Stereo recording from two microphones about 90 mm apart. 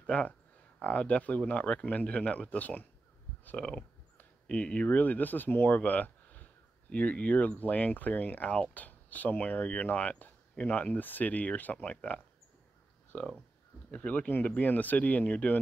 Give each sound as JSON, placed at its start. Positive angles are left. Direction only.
{"t": 0.0, "sound": "speech", "side_deg": 15}